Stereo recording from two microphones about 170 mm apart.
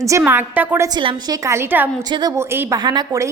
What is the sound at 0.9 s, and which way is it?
Speech, 25° right (ahead or behind).